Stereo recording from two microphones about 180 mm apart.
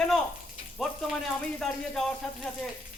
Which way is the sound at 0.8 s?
Centre (ahead or behind).